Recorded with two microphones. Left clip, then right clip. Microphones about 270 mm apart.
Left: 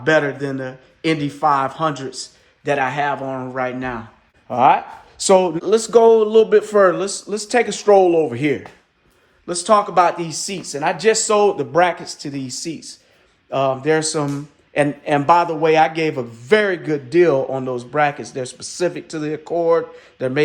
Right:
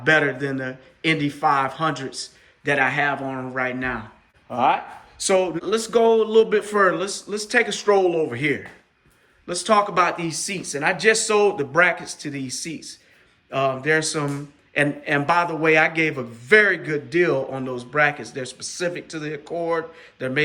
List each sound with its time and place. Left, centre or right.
0.0 s speech: centre
4.4 s speech: left